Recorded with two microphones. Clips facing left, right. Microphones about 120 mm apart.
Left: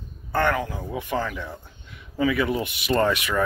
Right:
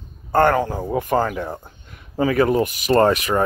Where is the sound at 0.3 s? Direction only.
45° right (ahead or behind).